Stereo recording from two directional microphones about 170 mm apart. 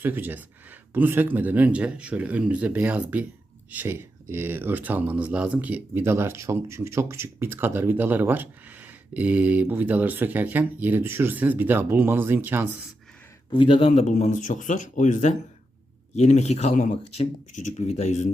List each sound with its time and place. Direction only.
0.0 s speech: 10° right (ahead or behind)
13.5 s speech: 30° left (ahead or behind)